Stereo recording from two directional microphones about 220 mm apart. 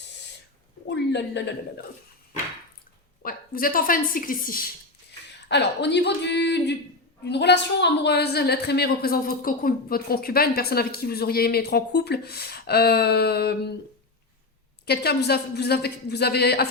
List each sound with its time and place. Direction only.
0.9 s a woman's voice: 50° left (ahead or behind)
3.2 s a woman's voice: 40° left (ahead or behind)
5.5 s a woman's voice: 50° left (ahead or behind)
14.8 s a woman's voice: 45° left (ahead or behind)